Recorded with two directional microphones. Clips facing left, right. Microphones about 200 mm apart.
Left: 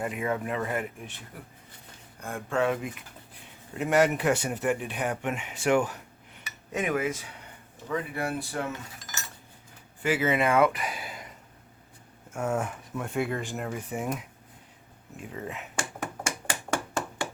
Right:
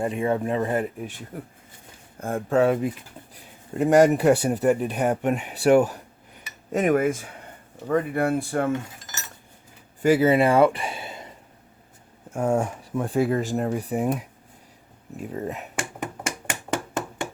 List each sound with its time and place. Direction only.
0.0 s speech: 30° right (ahead or behind)
1.3 s speech: 45° right (ahead or behind)
10.0 s speech: 40° right (ahead or behind)
12.3 s speech: 30° right (ahead or behind)
16.0 s a sound: 20° right (ahead or behind)